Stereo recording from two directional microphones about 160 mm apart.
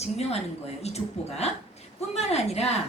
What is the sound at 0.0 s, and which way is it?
A woman's voice, 40° left (ahead or behind).